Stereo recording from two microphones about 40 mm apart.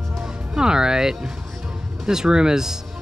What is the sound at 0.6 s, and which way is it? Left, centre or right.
Speech, centre.